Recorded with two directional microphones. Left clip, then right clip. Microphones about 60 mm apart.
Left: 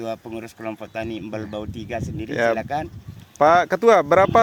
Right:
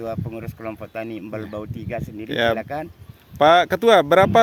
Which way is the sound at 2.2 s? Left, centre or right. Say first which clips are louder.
Even; right.